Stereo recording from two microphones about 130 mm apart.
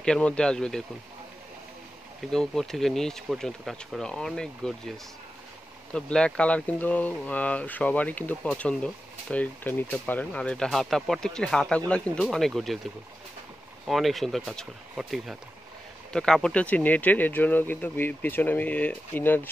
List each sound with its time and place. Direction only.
0.0 s speech: 10° left (ahead or behind)
2.3 s speech: 5° left (ahead or behind)
5.9 s speech: 5° left (ahead or behind)
13.8 s speech: centre (ahead or behind); by 19.5 s 15° left (ahead or behind)